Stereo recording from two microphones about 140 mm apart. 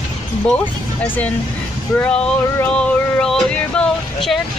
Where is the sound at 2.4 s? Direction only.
20° left (ahead or behind).